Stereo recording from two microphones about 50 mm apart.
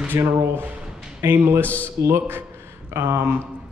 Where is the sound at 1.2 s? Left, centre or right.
Right.